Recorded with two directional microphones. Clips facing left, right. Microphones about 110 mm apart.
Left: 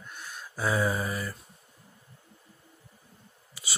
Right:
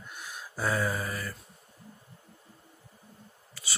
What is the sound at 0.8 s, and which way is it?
Speech, 15° left (ahead or behind).